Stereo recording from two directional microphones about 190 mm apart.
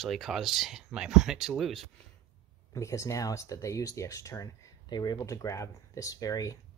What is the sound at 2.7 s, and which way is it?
Speech, 15° left (ahead or behind).